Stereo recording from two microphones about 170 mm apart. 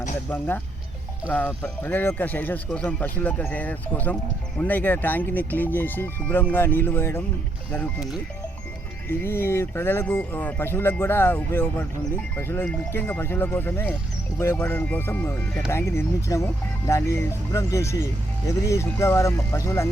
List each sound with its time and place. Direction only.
0.3 s speech: 10° left (ahead or behind)
9.0 s speech: 15° left (ahead or behind)